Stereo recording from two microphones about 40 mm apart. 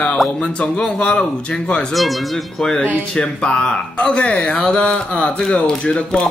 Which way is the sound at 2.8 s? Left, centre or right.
Left.